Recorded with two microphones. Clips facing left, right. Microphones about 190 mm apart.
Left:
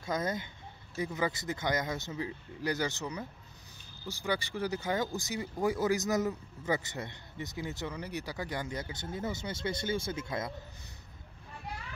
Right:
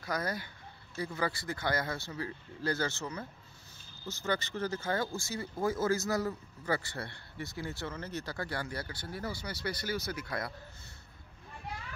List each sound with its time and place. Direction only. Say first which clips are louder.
0.0 s speech: left 2 dB; 20° left (ahead or behind)